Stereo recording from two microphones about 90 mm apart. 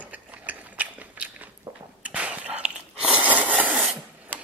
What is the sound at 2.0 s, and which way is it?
Wheeze, 15° right (ahead or behind).